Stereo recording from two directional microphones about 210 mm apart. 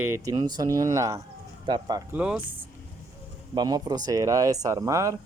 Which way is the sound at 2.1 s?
5° right (ahead or behind).